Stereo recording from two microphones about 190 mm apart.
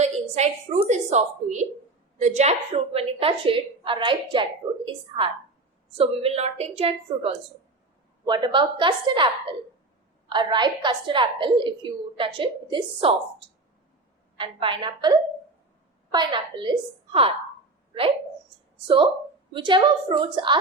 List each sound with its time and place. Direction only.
0.0 s a woman's voice: 35° right (ahead or behind)
14.3 s a woman's voice: 25° right (ahead or behind)
19.5 s a woman's voice: 25° right (ahead or behind)